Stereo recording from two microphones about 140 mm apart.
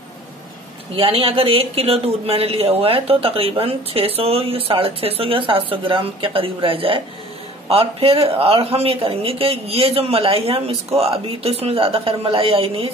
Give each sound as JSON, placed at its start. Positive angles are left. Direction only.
{"t": 0.9, "sound": "a man's voice", "side_deg": -40}